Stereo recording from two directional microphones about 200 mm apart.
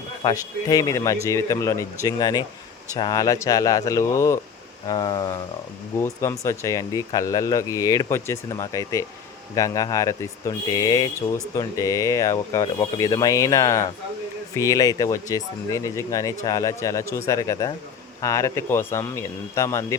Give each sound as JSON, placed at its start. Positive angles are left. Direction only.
{"t": 0.2, "sound": "speech", "side_deg": 20}
{"t": 4.9, "sound": "a sound", "side_deg": 20}
{"t": 6.0, "sound": "speech", "side_deg": 15}